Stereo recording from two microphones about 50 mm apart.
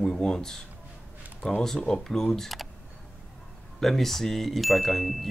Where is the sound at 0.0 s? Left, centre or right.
Centre.